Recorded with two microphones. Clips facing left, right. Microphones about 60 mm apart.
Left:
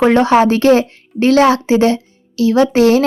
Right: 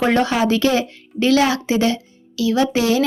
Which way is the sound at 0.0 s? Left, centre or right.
Left.